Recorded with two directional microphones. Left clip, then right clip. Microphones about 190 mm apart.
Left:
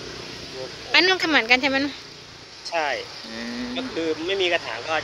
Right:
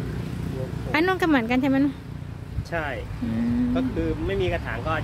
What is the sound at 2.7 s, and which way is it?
Speech, 40° left (ahead or behind).